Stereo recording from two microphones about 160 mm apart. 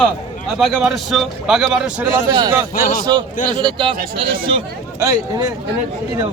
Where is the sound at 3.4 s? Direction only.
30° right (ahead or behind).